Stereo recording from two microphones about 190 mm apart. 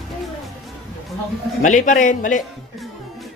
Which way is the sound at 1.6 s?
40° left (ahead or behind).